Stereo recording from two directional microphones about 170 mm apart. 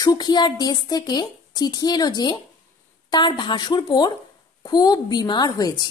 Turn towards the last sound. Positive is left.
turn(degrees=25)  # may be behind; listen again after turning